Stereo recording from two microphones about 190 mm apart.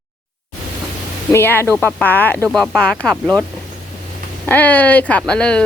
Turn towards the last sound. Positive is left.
turn(degrees=5)  # may be behind; listen again after turning